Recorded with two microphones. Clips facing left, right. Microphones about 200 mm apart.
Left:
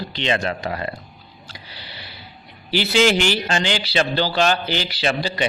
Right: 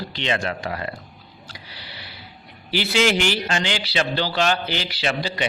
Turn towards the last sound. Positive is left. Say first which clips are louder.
# left 3 dB
turn(degrees=35)  # may be behind; listen again after turning